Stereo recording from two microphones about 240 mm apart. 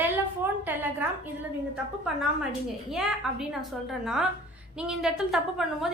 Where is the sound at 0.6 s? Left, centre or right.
Centre.